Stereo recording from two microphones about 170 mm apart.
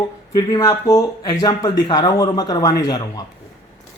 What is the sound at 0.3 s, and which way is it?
Speech, 20° left (ahead or behind).